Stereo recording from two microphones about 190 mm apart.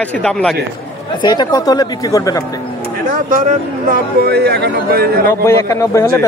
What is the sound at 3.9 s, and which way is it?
Speech, 55° right (ahead or behind).